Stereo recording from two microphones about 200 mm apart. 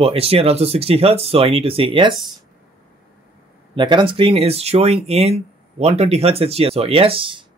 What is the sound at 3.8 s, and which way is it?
Speech, 25° right (ahead or behind).